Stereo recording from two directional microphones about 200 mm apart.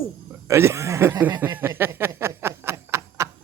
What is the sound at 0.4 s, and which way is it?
Speech, 15° right (ahead or behind).